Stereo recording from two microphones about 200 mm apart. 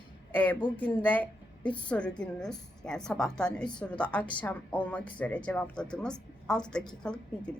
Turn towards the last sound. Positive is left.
turn(degrees=5)  # may be behind; listen again after turning